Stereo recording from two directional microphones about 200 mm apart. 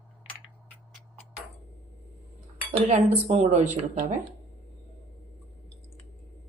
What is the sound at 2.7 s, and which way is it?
Speech, 30° right (ahead or behind).